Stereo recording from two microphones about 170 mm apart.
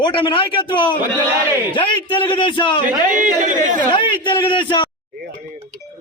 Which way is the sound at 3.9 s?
30° left (ahead or behind).